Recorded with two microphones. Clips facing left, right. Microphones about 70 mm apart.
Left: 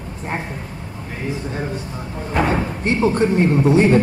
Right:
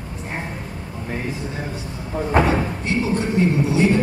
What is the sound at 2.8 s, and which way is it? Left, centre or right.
A man's voice, left.